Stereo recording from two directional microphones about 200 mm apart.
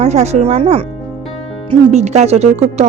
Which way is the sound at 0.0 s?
35° right (ahead or behind).